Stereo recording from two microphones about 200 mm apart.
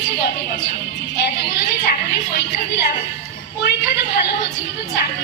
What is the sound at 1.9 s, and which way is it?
Music, 55° left (ahead or behind).